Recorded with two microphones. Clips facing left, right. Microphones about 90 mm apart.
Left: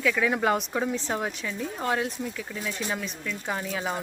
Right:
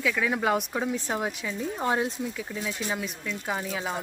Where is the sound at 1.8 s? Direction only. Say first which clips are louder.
Right 1 dB; 20° right (ahead or behind).